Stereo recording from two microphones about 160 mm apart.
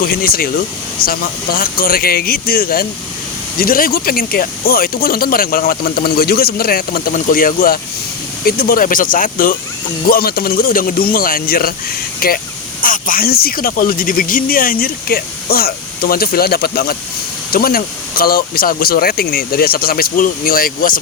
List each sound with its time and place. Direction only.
0.0 s speech: 65° left (ahead or behind)
10.1 s speech: 70° left (ahead or behind)